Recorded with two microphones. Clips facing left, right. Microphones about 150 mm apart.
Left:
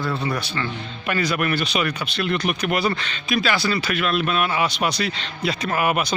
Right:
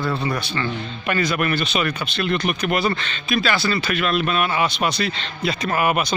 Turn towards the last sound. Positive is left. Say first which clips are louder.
# right 1 dB
turn(degrees=0)  # may be behind; listen again after turning